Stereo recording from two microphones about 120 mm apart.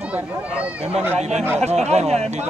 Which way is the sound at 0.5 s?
10° right (ahead or behind).